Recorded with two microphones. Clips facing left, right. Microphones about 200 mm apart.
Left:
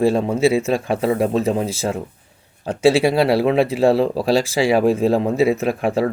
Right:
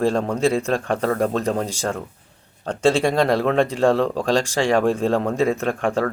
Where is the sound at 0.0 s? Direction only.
5° left (ahead or behind).